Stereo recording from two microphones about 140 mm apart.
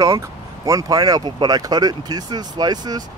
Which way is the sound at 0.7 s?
25° right (ahead or behind).